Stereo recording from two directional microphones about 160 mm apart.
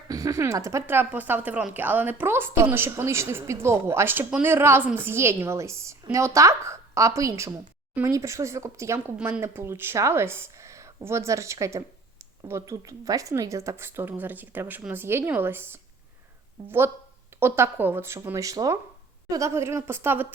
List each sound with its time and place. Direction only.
0.1 s speech: 20° right (ahead or behind)
9.1 s speech: 5° right (ahead or behind)